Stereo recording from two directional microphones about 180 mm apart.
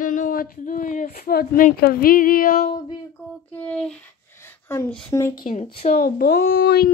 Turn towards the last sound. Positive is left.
turn(degrees=65)  # may be behind; listen again after turning